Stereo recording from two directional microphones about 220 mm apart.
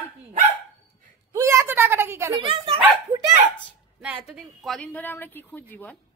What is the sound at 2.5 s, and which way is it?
Speech, 25° right (ahead or behind).